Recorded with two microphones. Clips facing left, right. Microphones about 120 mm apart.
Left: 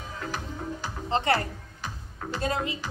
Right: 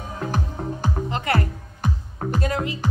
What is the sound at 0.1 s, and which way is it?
Music, 45° right (ahead or behind).